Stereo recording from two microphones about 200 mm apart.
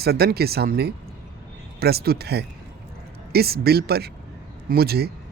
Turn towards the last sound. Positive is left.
turn(degrees=-50)  # may be behind; listen again after turning